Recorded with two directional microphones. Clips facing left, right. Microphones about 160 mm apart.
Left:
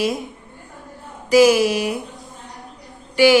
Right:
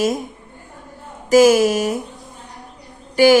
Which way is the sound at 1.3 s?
45° right (ahead or behind).